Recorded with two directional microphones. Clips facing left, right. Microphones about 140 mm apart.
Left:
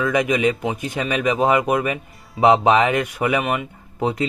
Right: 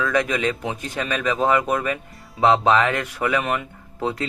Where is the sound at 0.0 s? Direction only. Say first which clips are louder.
Left 3 dB; 15° left (ahead or behind).